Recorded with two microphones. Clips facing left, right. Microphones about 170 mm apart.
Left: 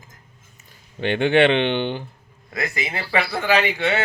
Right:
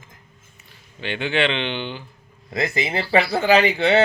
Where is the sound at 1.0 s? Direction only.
50° left (ahead or behind).